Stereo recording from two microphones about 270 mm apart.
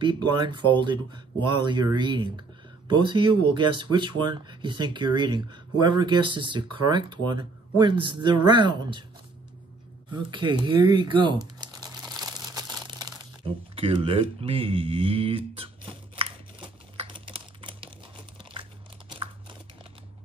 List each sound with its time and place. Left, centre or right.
0.0 s speech: centre
10.1 s speech: centre
11.6 s crumpling: centre
13.7 s a sound: centre
18.4 s biting: centre